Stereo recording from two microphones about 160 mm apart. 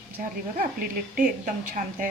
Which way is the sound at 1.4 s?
55° right (ahead or behind).